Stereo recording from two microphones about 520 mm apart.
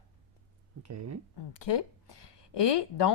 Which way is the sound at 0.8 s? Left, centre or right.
Right.